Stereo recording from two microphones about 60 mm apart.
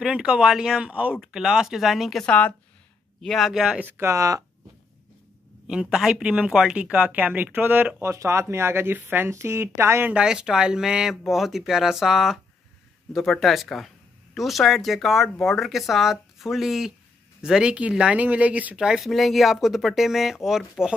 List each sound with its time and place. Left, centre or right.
0.0 s speech: centre
1.1 s speech: centre
2.2 s a woman's voice: left
3.2 s speech: centre
3.8 s speech: right
5.7 s speech: centre; by 8.0 s right
8.0 s speech: right
10.1 s speech: centre
18.8 s speech: centre
19.0 s speech: centre